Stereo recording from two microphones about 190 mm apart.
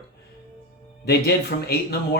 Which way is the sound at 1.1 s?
55° left (ahead or behind).